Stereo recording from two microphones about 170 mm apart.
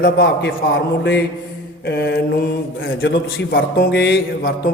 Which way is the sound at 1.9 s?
80° left.